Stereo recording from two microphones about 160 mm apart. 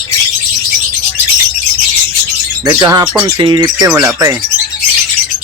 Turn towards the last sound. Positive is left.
turn(degrees=-20)  # may be behind; listen again after turning